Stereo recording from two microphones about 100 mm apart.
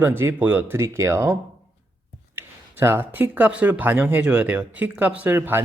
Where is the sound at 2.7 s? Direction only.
20° right (ahead or behind).